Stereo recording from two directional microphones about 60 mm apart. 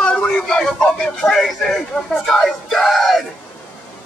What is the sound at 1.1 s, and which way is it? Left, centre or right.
Speech, centre.